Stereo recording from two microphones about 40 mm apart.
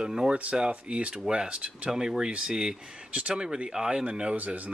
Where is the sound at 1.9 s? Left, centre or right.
Centre.